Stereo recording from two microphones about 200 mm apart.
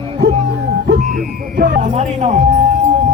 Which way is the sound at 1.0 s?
40° right (ahead or behind).